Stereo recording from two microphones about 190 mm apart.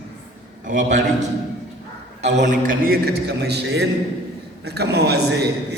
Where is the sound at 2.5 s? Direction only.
50° right (ahead or behind).